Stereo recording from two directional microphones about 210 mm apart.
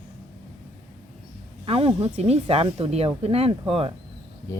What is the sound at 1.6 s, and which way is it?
Speech, 25° right (ahead or behind).